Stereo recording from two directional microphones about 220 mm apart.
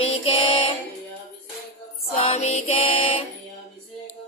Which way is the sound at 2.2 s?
30° left (ahead or behind).